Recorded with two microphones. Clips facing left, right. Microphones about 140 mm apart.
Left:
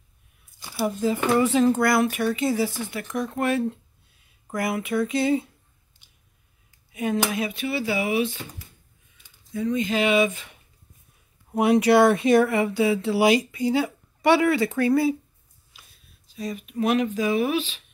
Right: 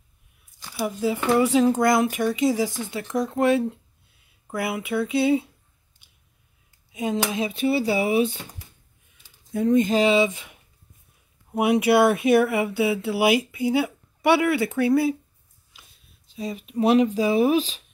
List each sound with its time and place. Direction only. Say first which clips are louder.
0.6 s a sound: left 1 dB; 10° left (ahead or behind)
0.8 s speech: even; 10° right (ahead or behind)
6.9 s speech: even; 20° right (ahead or behind); by 8.4 s 35° right (ahead or behind)
9.5 s speech: right 5 dB; 50° right (ahead or behind); by 10.4 s 25° right (ahead or behind)
11.5 s speech: left 1 dB; 10° right (ahead or behind)
16.3 s speech: right 2 dB; 25° right (ahead or behind)